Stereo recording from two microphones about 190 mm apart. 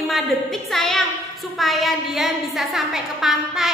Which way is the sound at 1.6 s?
Centre (ahead or behind).